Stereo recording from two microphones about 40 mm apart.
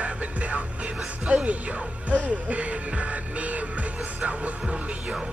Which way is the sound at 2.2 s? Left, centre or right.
Right.